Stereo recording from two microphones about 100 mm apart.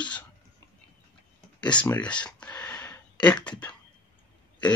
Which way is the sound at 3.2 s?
15° left (ahead or behind).